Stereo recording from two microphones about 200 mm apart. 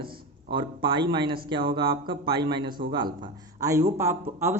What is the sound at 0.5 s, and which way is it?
Speech, 25° right (ahead or behind).